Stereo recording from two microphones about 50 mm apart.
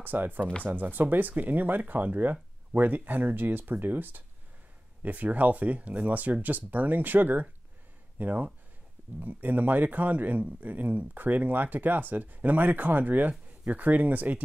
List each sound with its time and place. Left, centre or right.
0.0 s speech: right
0.4 s speech: centre
0.7 s speech: right